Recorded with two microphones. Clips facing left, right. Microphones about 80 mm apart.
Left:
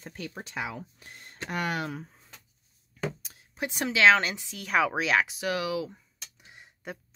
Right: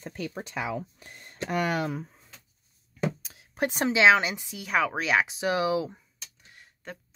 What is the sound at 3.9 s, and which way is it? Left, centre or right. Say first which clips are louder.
Speech: even; centre.